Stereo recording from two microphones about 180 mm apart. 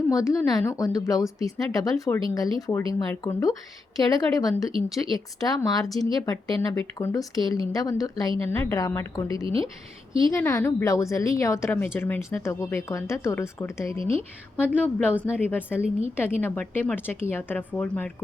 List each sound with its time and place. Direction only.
0.1 s speech: 15° left (ahead or behind)
10.1 s a woman's voice: 30° right (ahead or behind)
10.3 s speech: 15° left (ahead or behind)